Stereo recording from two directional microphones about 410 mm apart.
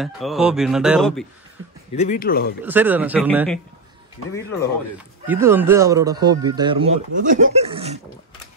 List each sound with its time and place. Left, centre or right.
0.0 s speech: centre
2.0 s speech: centre
2.6 s speech: centre
5.2 s speech: centre